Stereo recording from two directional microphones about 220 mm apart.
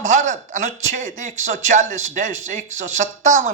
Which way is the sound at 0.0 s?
35° right (ahead or behind).